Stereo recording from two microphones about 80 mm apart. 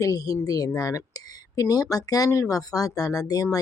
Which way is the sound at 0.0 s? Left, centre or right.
Left.